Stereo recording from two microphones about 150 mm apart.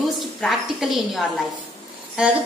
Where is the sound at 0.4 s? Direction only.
Centre (ahead or behind).